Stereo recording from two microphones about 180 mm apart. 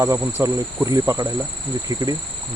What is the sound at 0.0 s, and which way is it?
Insect, 15° right (ahead or behind).